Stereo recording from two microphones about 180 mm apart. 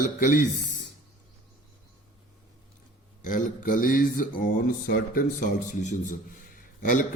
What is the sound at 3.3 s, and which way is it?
A man's voice, 45° left (ahead or behind).